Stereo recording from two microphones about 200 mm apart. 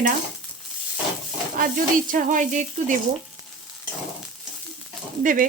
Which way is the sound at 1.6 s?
45° right (ahead or behind).